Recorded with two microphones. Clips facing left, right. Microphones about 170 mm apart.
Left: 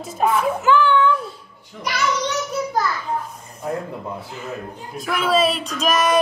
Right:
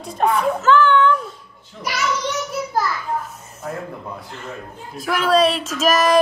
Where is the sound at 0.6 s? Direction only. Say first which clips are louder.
Right 2 dB; 15° left (ahead or behind).